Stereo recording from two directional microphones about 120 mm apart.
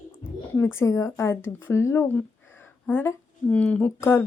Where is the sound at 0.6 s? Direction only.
25° left (ahead or behind).